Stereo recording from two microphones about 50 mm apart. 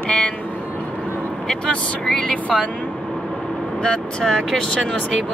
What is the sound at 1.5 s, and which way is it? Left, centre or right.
Speech, centre.